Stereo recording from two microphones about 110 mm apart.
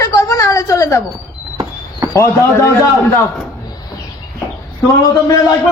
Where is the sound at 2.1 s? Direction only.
25° left (ahead or behind).